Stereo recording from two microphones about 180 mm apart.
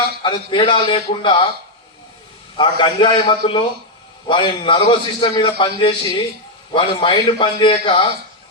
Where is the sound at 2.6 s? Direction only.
25° left (ahead or behind).